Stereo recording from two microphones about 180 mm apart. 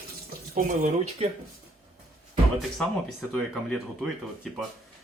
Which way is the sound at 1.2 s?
35° right (ahead or behind).